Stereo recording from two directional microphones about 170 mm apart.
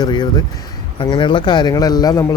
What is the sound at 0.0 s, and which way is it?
Speech, 25° left (ahead or behind).